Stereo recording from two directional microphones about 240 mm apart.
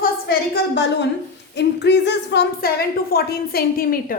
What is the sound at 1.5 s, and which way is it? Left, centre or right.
A woman's voice, left.